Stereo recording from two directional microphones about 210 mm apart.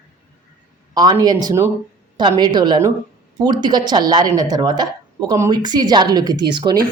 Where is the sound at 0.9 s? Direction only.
20° right (ahead or behind).